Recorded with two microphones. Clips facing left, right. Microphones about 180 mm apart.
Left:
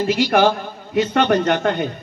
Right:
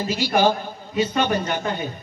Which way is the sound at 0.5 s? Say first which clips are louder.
Left 1 dB; 10° right (ahead or behind).